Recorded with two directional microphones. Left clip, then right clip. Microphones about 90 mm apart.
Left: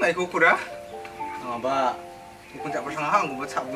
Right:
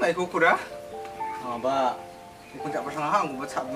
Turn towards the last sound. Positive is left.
turn(degrees=0)  # may be behind; listen again after turning